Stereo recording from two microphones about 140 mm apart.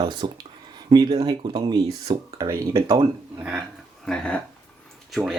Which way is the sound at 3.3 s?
10° right (ahead or behind).